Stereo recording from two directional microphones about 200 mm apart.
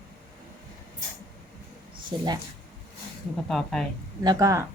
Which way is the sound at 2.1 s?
25° right (ahead or behind).